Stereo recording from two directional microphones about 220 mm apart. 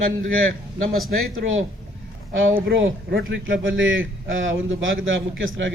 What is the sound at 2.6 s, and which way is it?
A man's voice, 50° right (ahead or behind).